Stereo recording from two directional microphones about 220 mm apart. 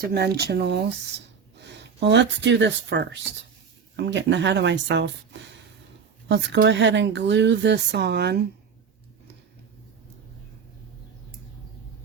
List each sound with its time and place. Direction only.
0.1 s speech: 45° right (ahead or behind)
6.2 s speech: 50° right (ahead or behind)